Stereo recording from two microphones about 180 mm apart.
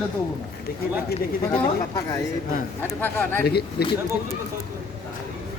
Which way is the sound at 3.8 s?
60° left (ahead or behind).